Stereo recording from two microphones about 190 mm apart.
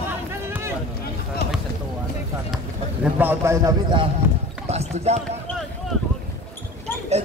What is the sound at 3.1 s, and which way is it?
Speech, 10° right (ahead or behind).